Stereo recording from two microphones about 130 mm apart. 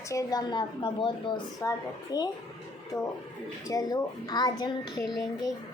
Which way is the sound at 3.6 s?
30° left (ahead or behind).